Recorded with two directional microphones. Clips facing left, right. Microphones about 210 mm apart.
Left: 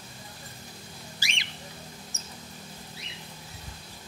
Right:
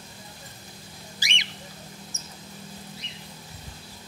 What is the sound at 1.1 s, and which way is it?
Bird, 20° right (ahead or behind).